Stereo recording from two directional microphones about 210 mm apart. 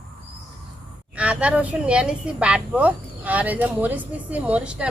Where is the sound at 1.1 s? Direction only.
5° right (ahead or behind).